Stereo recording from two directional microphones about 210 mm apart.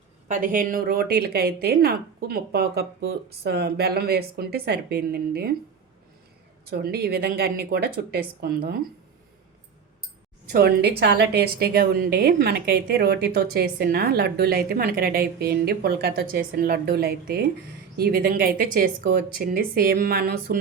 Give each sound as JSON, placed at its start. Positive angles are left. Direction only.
{"t": 0.3, "sound": "a woman's voice", "side_deg": -40}
{"t": 6.7, "sound": "a woman's voice", "side_deg": -45}
{"t": 10.5, "sound": "a woman's voice", "side_deg": -45}